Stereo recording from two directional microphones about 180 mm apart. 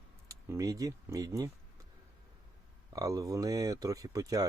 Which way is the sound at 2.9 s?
20° right (ahead or behind).